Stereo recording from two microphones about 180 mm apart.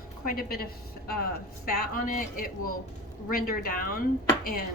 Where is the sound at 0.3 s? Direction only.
55° left (ahead or behind).